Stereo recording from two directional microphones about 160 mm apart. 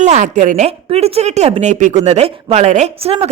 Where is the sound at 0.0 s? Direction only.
50° right (ahead or behind).